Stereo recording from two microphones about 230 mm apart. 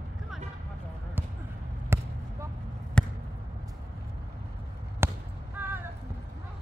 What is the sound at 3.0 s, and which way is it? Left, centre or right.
Basketball bounce, centre.